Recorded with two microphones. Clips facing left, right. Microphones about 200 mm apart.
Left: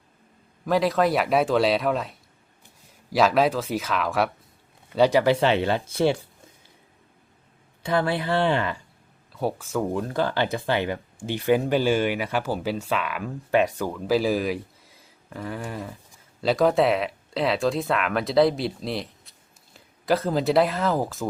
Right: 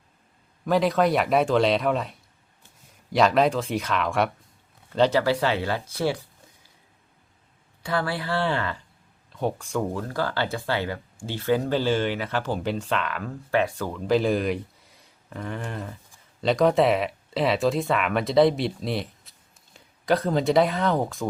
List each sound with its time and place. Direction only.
0.6 s speech: centre (ahead or behind)
4.9 s speech: 15° left (ahead or behind)
7.8 s speech: 20° left (ahead or behind)
9.3 s speech: 5° left (ahead or behind)
9.9 s speech: 20° left (ahead or behind); by 21.2 s centre (ahead or behind)